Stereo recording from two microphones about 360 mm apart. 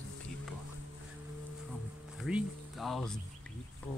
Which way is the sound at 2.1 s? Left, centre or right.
Centre.